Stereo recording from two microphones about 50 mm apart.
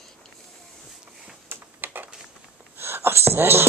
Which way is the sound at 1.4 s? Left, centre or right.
Right.